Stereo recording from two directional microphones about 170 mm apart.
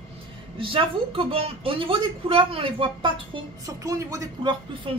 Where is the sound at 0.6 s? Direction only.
30° right (ahead or behind).